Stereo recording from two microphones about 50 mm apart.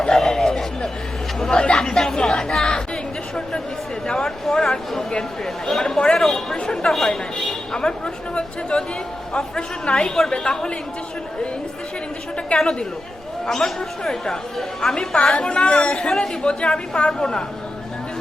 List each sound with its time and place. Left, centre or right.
0.1 s a sound: centre
1.4 s chatter: centre
4.0 s speech: centre
4.5 s a sound: centre
5.6 s a woman's voice: centre
12.5 s a woman's voice: centre